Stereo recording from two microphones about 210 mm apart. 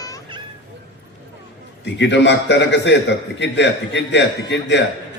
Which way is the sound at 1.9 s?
55° left (ahead or behind).